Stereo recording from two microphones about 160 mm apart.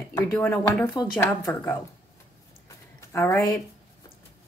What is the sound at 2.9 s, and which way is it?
Speech, 20° left (ahead or behind).